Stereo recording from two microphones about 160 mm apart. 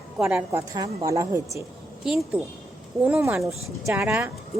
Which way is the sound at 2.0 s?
Centre (ahead or behind).